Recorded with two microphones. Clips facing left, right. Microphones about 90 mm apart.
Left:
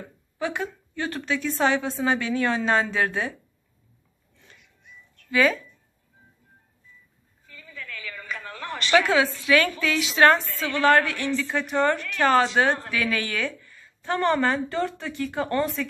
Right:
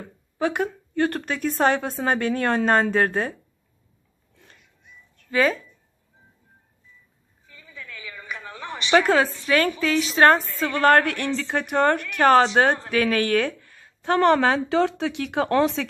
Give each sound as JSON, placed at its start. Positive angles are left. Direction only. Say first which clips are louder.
{"t": 0.4, "sound": "a woman's voice", "louder": "right 5 dB", "side_deg": -55}
{"t": 5.3, "sound": "a woman's voice", "louder": "even", "side_deg": -35}
{"t": 7.4, "sound": "a sound", "louder": "left 2 dB", "side_deg": -20}
{"t": 9.0, "sound": "a woman's voice", "louder": "right 2 dB", "side_deg": -40}
{"t": 10.8, "sound": "a woman's voice", "louder": "right 2 dB", "side_deg": -50}